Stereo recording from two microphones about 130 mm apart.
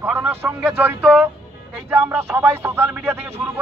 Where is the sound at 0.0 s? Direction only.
15° right (ahead or behind).